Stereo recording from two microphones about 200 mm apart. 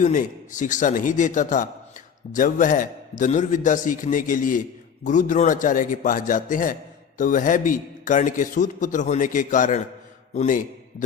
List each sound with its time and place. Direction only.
0.0 s a man's voice: 40° left (ahead or behind)